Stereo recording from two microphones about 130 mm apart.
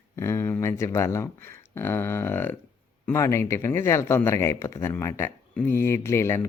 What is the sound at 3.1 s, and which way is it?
Speech, 20° left (ahead or behind).